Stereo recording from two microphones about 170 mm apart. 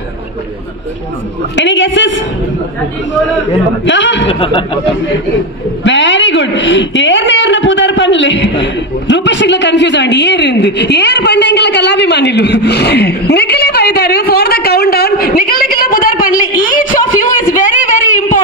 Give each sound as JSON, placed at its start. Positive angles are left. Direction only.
{"t": 1.6, "sound": "a woman's voice", "side_deg": 90}
{"t": 3.8, "sound": "a woman's voice", "side_deg": 90}
{"t": 4.3, "sound": "speech", "side_deg": 30}
{"t": 5.9, "sound": "a woman's voice", "side_deg": 90}